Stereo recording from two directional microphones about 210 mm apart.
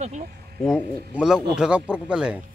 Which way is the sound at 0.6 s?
Centre (ahead or behind).